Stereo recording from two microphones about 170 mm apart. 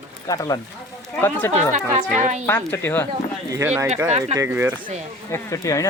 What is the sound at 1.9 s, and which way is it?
Speech, 45° right (ahead or behind).